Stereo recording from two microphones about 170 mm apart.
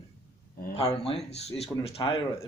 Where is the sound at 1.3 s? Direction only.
40° left (ahead or behind).